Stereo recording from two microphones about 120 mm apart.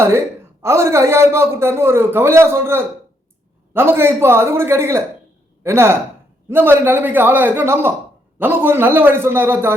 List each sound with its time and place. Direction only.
0.6 s a man's voice: 25° right (ahead or behind)